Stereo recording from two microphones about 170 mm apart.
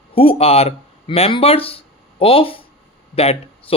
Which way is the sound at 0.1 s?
35° left (ahead or behind).